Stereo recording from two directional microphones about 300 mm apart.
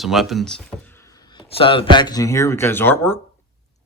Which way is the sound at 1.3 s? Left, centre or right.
Centre.